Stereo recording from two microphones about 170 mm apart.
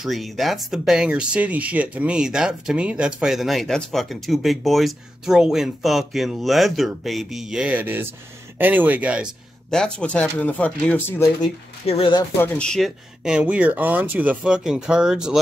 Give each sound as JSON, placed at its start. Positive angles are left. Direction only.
{"t": 0.0, "sound": "speech", "side_deg": 0}
{"t": 9.7, "sound": "speech", "side_deg": 5}
{"t": 11.8, "sound": "speech", "side_deg": 35}
{"t": 12.4, "sound": "speech", "side_deg": 5}